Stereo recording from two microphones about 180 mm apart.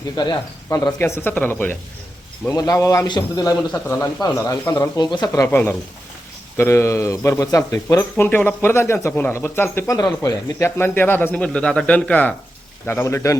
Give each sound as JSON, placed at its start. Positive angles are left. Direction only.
{"t": 0.2, "sound": "a man's voice", "side_deg": 20}